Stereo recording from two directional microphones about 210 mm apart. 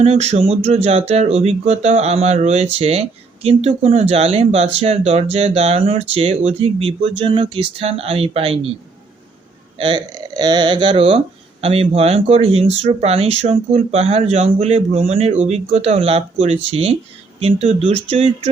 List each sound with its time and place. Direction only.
0.0 s speech: 30° right (ahead or behind)
9.7 s speech: 25° right (ahead or behind)